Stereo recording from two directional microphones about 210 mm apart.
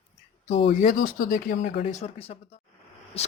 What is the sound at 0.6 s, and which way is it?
Speech, 35° left (ahead or behind).